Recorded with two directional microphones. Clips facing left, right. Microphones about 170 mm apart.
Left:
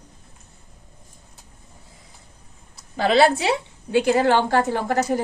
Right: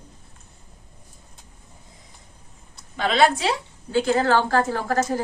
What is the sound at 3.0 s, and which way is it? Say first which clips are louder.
A woman's voice: left 3 dB; 30° left (ahead or behind).